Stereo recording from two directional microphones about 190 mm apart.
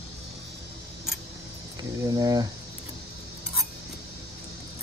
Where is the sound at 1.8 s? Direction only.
20° right (ahead or behind).